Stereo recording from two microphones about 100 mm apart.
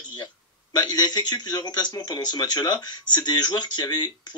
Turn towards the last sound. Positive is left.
turn(degrees=40)  # may be behind; listen again after turning